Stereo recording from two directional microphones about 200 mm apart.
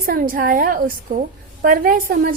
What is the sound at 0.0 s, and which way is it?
A woman's voice, 45° right (ahead or behind).